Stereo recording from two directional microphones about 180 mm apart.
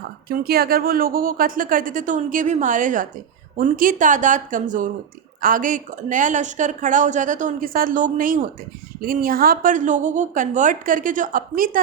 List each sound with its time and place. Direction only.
0.3 s speech: 60° right (ahead or behind)